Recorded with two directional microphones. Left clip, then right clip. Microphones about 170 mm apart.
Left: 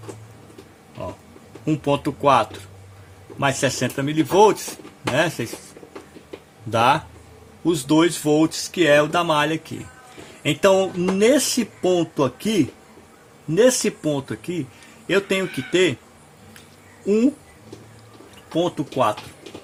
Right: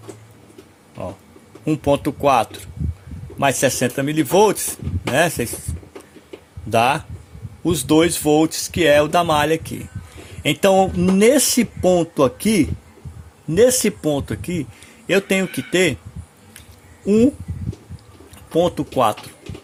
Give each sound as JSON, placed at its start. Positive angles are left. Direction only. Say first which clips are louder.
{"t": 1.6, "sound": "speech", "louder": "right 3 dB", "side_deg": -45}
{"t": 6.7, "sound": "speech", "louder": "right 1 dB", "side_deg": -45}
{"t": 18.5, "sound": "speech", "louder": "right 4 dB", "side_deg": -55}